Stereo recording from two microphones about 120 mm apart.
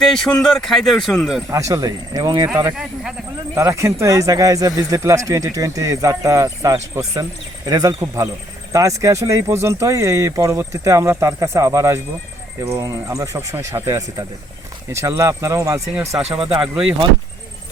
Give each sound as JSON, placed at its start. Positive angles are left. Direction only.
{"t": 0.0, "sound": "speech", "side_deg": 5}
{"t": 1.5, "sound": "speech", "side_deg": -25}
{"t": 2.7, "sound": "speech", "side_deg": -5}
{"t": 3.5, "sound": "speech", "side_deg": -25}
{"t": 16.2, "sound": "speech", "side_deg": -50}